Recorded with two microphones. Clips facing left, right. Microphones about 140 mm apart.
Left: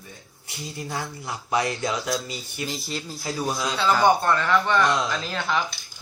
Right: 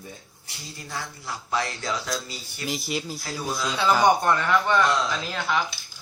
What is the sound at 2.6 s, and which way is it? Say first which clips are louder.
Speech: right 4 dB; 10° right (ahead or behind).